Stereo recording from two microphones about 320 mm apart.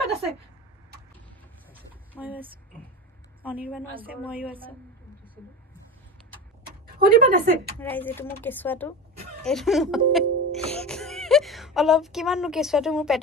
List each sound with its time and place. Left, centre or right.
1.7 s a sound: centre
3.4 s speech: centre
7.0 s speech: right
7.8 s speech: centre